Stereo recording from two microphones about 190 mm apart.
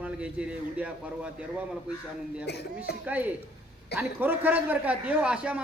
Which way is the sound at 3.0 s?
10° right (ahead or behind).